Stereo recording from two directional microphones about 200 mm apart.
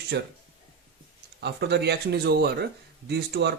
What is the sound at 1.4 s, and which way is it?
Speech, 55° right (ahead or behind).